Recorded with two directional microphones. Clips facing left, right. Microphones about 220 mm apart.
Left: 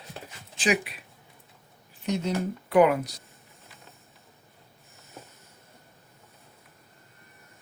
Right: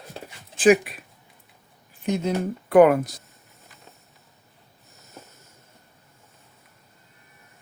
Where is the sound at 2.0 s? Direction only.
50° right (ahead or behind).